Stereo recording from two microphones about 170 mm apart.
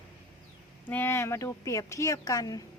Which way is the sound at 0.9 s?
15° left (ahead or behind).